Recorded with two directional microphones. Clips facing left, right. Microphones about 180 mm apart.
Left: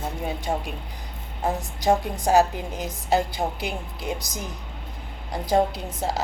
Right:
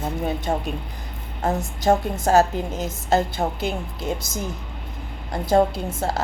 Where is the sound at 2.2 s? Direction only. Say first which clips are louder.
Right 2 dB; 15° left (ahead or behind).